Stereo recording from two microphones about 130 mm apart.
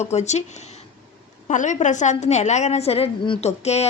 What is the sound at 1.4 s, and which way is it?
A woman's voice, 70° left (ahead or behind).